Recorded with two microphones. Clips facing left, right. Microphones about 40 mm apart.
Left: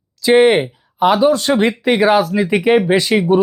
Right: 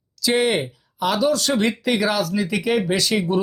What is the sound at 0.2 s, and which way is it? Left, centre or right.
Speech, left.